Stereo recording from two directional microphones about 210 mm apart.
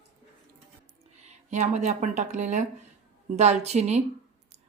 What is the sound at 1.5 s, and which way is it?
Speech, 35° right (ahead or behind).